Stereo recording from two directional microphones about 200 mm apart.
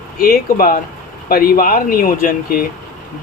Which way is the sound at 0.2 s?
45° left (ahead or behind).